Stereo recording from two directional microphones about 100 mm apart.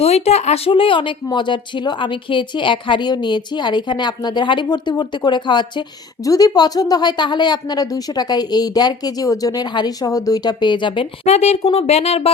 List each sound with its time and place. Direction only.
0.0 s speech: 90° left; by 5.8 s 50° left (ahead or behind)
6.2 s speech: 40° left (ahead or behind); by 12.3 s 90° left